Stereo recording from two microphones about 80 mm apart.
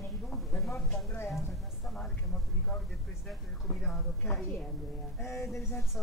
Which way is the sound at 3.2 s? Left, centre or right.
Centre.